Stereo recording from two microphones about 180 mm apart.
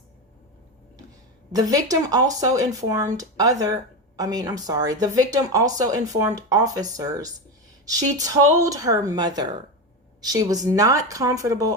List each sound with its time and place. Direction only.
1.5 s speech: 20° right (ahead or behind)